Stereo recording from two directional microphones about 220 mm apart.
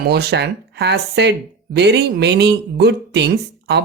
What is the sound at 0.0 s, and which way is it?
Speech, 45° right (ahead or behind).